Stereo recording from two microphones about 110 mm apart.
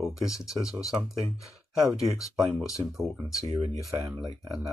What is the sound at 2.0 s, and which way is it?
Speech, 30° left (ahead or behind).